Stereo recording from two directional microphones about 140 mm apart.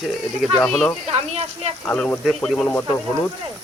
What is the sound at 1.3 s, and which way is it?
Speech, 50° right (ahead or behind).